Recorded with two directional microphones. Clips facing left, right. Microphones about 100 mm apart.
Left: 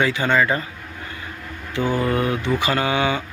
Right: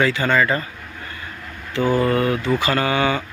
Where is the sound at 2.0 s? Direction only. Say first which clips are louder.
Right 2 dB; 15° left (ahead or behind).